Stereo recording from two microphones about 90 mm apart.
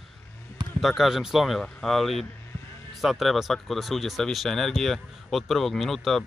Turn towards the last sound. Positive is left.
turn(degrees=0)  # may be behind; listen again after turning